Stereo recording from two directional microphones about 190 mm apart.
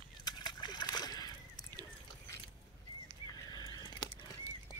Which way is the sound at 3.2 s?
20° left (ahead or behind).